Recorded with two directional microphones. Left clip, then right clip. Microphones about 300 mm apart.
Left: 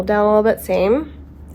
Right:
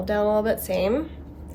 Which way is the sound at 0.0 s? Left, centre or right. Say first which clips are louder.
Left 8 dB; centre.